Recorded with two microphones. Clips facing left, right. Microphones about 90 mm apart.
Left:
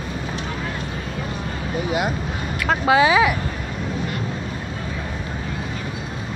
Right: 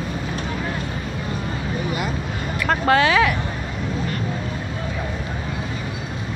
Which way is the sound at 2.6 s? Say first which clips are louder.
Left 1 dB; 5° left (ahead or behind).